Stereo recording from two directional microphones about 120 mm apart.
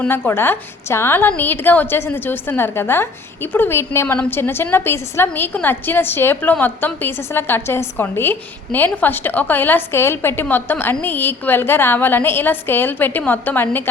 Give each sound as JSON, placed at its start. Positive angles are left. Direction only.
{"t": 0.0, "sound": "a woman's voice", "side_deg": 20}